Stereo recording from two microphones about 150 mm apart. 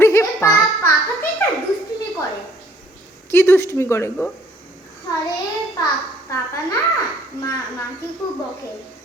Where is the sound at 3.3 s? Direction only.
15° left (ahead or behind).